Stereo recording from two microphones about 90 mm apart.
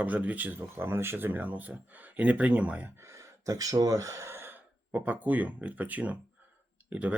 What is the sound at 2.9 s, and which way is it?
Speech, 30° right (ahead or behind).